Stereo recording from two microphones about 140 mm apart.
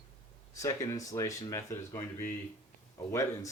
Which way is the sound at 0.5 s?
25° left (ahead or behind).